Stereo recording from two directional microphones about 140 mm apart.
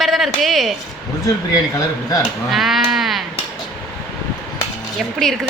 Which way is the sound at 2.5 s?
Centre (ahead or behind).